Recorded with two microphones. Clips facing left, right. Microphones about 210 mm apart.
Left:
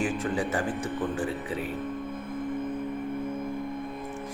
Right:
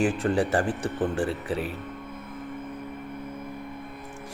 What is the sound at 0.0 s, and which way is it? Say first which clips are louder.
Speech: right 4 dB; 70° right (ahead or behind).